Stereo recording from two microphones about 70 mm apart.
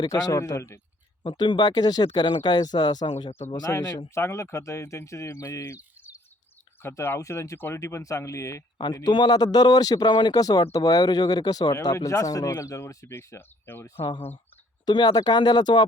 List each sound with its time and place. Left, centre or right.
0.1 s speech: left
1.4 s speech: left
3.7 s speech: left
4.1 s speech: left
7.6 s speech: left
9.0 s speech: left
11.7 s speech: left
13.1 s speech: left
14.8 s speech: left